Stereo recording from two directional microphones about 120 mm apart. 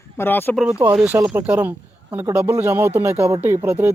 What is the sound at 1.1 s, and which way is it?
Speech, 25° right (ahead or behind).